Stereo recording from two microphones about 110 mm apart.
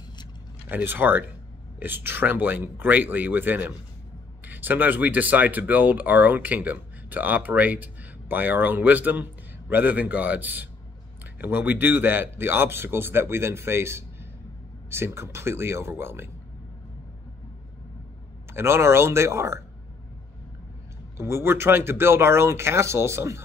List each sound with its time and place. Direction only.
0.7 s speech: 15° right (ahead or behind)
18.5 s speech: 25° right (ahead or behind)
21.2 s speech: 25° right (ahead or behind)